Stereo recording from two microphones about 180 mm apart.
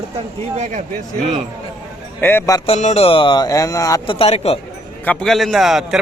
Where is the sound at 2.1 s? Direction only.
10° left (ahead or behind).